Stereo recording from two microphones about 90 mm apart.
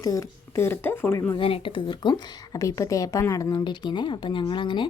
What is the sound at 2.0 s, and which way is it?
A woman's voice, 40° left (ahead or behind).